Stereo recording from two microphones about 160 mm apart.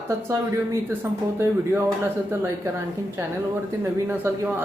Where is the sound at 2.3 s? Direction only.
15° right (ahead or behind).